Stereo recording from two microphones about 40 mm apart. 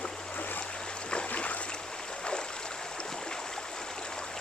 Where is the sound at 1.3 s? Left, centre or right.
Left.